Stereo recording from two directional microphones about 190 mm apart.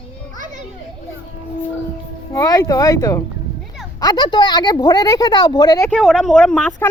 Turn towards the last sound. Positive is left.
turn(degrees=5)  # may be behind; listen again after turning